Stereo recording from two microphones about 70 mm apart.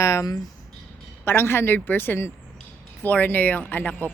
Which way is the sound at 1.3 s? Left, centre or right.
Left.